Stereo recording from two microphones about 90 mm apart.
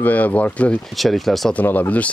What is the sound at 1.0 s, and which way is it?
Speech, centre (ahead or behind).